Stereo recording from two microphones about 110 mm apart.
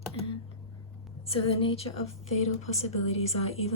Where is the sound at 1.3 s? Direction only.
60° left (ahead or behind).